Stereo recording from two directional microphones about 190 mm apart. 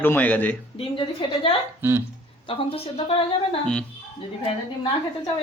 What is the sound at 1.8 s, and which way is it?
Speech, 10° right (ahead or behind).